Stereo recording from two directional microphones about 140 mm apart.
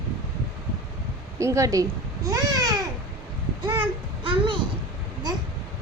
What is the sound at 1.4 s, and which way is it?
Speech, 20° right (ahead or behind).